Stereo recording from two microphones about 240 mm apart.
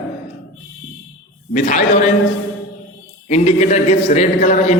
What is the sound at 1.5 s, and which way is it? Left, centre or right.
Speech, left.